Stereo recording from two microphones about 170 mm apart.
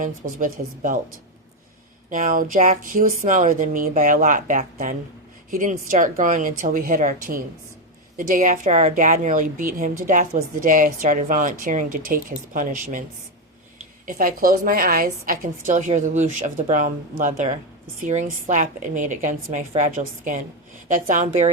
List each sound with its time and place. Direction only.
0.0 s a woman's voice: 50° right (ahead or behind)
2.0 s a woman's voice: 50° right (ahead or behind)
14.2 s a woman's voice: 55° right (ahead or behind)